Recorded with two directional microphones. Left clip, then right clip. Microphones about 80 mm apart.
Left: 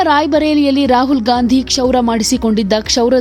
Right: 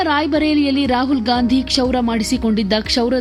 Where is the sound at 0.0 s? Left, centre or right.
Left.